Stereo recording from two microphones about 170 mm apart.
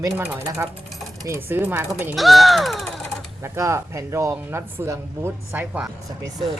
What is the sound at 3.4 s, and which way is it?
Speech, 15° right (ahead or behind).